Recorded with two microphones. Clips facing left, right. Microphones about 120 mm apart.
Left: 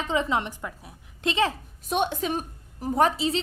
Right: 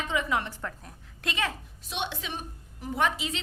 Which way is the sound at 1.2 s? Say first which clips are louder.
Left 7 dB; 25° left (ahead or behind).